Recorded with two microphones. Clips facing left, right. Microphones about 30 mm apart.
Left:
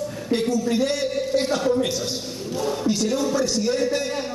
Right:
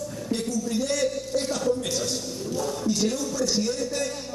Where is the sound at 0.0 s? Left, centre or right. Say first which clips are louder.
Left 6 dB; left.